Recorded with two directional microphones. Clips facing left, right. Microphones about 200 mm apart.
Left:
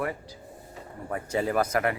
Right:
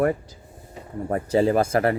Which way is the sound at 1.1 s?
35° right (ahead or behind).